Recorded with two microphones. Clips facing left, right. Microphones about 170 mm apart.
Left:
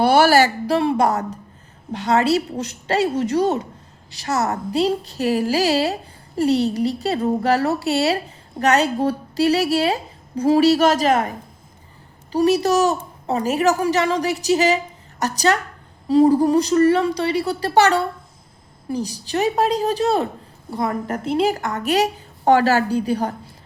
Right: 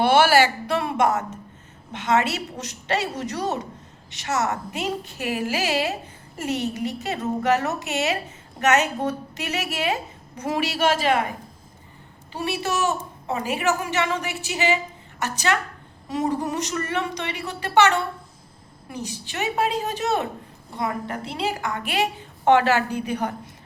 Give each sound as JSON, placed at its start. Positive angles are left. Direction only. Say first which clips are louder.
{"t": 0.0, "sound": "a woman's voice", "louder": "left 3 dB", "side_deg": 40}
{"t": 12.3, "sound": "a woman's voice", "louder": "left 10 dB", "side_deg": 40}